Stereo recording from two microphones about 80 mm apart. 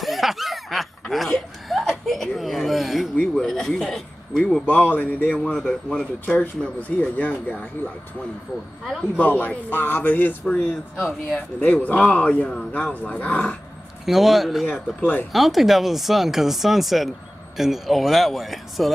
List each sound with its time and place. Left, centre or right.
0.0 s a sound: centre
1.1 s chuckle: centre
3.2 s speech: centre
4.6 s speech: left
5.4 s speech: centre
6.2 s speech: centre
9.2 s speech: left
11.0 s speech: centre
11.6 s speech: left
14.0 s speech: centre
14.7 s speech: left
15.3 s speech: centre